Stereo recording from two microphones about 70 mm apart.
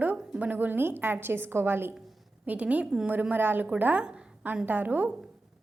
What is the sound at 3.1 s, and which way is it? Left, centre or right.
Speech, right.